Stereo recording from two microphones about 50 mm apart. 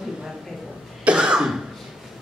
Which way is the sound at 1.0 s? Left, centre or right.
Centre.